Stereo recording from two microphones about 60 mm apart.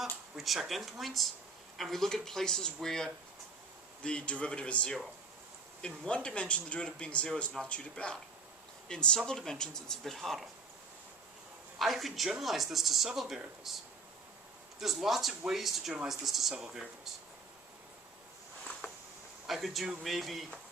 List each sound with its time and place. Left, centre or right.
0.0 s speech: centre
11.8 s speech: centre
14.8 s speech: centre
19.5 s speech: centre